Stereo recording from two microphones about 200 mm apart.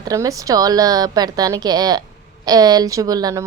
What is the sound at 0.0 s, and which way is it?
A woman's voice, 15° right (ahead or behind).